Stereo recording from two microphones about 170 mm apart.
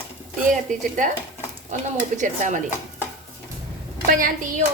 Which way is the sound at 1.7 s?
45° right (ahead or behind).